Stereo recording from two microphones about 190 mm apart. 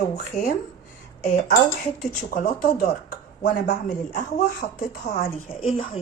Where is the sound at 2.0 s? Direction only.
50° left (ahead or behind).